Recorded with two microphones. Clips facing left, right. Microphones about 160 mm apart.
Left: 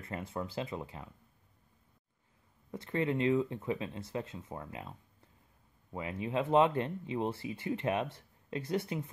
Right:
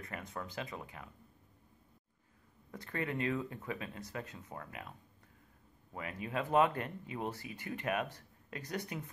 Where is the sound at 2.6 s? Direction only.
20° left (ahead or behind).